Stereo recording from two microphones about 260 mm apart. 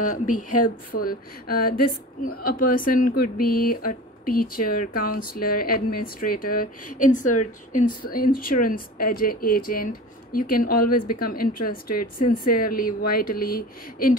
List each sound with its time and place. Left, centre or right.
0.0 s speech: left